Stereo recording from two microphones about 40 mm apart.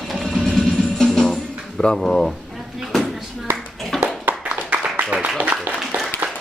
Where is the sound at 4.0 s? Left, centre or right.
Right.